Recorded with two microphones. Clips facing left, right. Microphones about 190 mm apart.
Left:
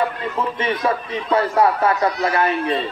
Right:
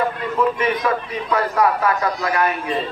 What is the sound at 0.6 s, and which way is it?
A man's voice, 25° left (ahead or behind).